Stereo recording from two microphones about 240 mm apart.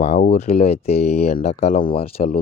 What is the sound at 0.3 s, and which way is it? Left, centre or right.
Speech, left.